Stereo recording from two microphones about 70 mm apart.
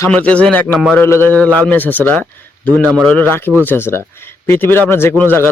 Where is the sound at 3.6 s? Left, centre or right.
Left.